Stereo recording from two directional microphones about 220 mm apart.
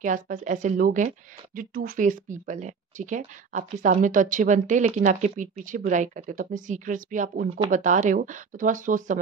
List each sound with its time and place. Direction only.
0.0 s a woman's voice: 35° right (ahead or behind)